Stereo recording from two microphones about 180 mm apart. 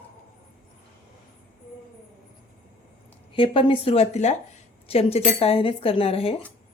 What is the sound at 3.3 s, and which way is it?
Speech, 30° left (ahead or behind).